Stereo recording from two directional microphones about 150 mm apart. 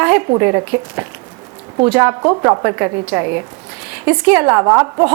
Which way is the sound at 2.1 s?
25° right (ahead or behind).